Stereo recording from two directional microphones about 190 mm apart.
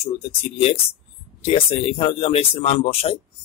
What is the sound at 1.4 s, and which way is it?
Speech, 30° left (ahead or behind).